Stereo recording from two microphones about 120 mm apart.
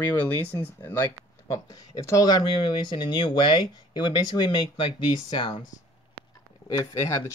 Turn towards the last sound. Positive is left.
turn(degrees=25)  # may be behind; listen again after turning